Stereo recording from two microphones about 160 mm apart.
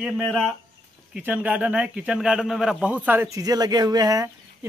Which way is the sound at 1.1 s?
10° right (ahead or behind).